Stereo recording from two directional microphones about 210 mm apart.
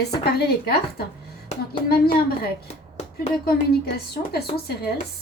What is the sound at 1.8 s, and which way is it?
Speech, 45° left (ahead or behind).